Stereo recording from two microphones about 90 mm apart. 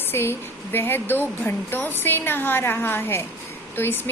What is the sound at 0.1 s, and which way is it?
Speech, 25° left (ahead or behind).